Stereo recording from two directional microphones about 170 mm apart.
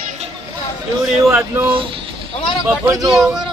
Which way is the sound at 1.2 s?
15° right (ahead or behind).